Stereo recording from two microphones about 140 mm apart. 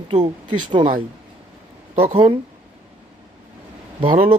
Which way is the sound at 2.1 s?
35° right (ahead or behind).